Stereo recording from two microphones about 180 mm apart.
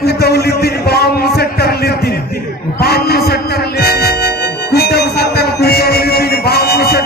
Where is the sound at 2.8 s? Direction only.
60° left (ahead or behind).